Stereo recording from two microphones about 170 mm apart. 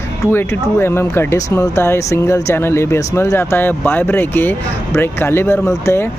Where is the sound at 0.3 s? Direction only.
15° left (ahead or behind).